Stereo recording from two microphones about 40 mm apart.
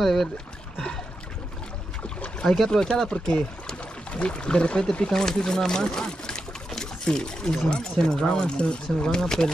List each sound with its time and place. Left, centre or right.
0.0 s speech: centre
2.4 s speech: centre
2.7 s speech: centre
5.1 s speech: centre
6.7 s pour: centre
7.7 s speech: centre